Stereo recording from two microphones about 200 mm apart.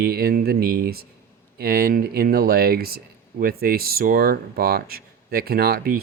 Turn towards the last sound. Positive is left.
turn(degrees=-50)  # may be behind; listen again after turning